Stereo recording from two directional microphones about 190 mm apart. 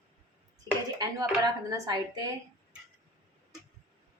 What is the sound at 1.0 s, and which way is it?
Speech, 20° right (ahead or behind).